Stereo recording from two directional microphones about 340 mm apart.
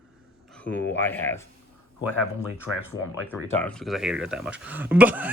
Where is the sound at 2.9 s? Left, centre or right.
Left.